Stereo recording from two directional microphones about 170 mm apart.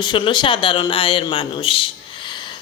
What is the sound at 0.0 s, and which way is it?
A man's voice, 30° left (ahead or behind).